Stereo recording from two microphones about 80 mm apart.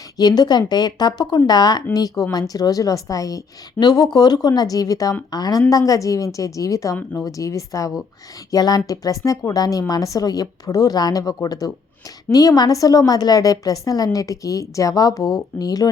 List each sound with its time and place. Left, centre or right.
0.2 s a woman's voice: left
6.9 s speech: left
7.3 s a woman's voice: left